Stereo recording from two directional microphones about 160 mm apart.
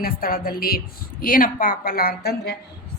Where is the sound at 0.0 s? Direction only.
70° left (ahead or behind).